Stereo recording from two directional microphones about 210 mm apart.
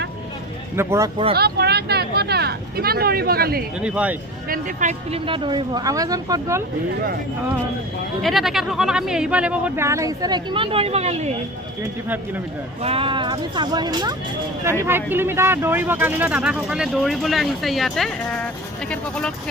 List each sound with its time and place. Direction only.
0.8 s speech: 15° right (ahead or behind)
1.4 s speech: 50° right (ahead or behind)
3.8 s speech: 5° right (ahead or behind)
4.4 s speech: 40° right (ahead or behind); by 6.6 s 15° right (ahead or behind)
8.2 s speech: centre (ahead or behind); by 11.3 s 30° right (ahead or behind)
11.8 s speech: 10° right (ahead or behind)
12.8 s speech: 25° right (ahead or behind); by 19.3 s 5° left (ahead or behind)